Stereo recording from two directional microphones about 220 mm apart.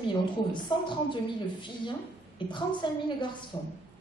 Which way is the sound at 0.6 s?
20° left (ahead or behind).